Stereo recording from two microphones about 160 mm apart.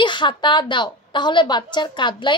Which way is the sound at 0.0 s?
30° left (ahead or behind).